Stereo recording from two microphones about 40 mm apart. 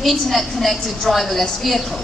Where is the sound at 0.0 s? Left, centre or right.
Centre.